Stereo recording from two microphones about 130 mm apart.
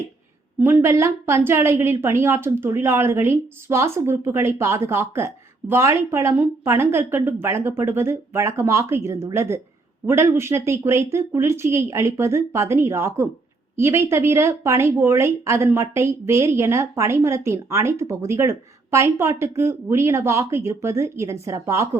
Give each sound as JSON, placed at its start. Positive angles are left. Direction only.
{"t": 0.6, "sound": "speech", "side_deg": -20}